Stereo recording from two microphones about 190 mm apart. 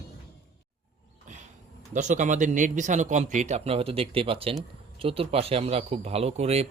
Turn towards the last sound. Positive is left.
turn(degrees=-35)  # may be behind; listen again after turning